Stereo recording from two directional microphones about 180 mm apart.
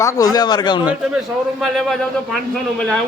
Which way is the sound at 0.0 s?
20° left (ahead or behind).